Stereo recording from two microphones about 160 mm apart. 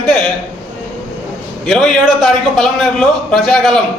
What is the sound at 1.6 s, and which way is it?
A man's voice, centre (ahead or behind).